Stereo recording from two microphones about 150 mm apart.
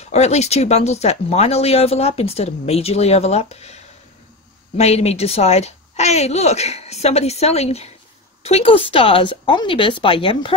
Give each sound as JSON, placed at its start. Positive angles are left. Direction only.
{"t": 0.0, "sound": "speech", "side_deg": 45}